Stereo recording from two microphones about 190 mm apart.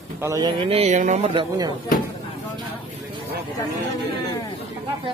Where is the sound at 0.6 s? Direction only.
30° right (ahead or behind).